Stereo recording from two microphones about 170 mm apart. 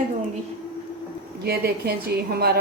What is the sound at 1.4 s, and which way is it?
A woman's voice, 65° right (ahead or behind).